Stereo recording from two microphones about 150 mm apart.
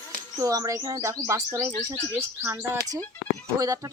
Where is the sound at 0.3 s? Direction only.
20° right (ahead or behind).